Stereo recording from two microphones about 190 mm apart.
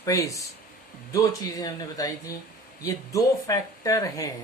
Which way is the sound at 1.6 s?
20° left (ahead or behind).